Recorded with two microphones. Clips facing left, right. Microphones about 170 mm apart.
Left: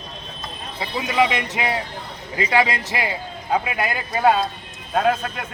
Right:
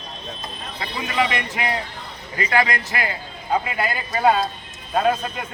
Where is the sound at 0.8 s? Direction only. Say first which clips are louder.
Left 3 dB; 20° left (ahead or behind).